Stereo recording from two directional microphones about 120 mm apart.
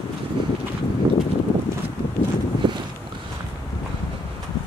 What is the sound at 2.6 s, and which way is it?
Boat, 40° right (ahead or behind).